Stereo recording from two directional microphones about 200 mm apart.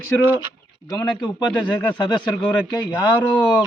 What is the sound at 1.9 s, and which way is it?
Speech, 20° left (ahead or behind).